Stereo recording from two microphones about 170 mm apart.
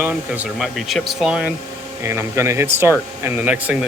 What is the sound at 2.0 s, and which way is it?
Speech, 15° right (ahead or behind).